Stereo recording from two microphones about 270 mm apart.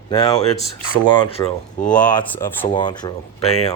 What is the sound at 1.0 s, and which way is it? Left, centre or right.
Speech, centre.